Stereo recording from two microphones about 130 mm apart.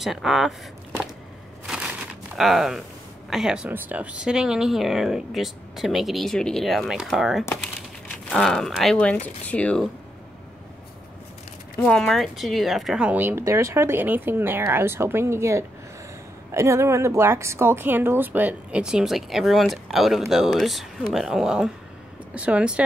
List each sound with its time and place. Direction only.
0.0 s speech: centre (ahead or behind)
2.3 s speech: centre (ahead or behind)
11.8 s speech: 5° left (ahead or behind)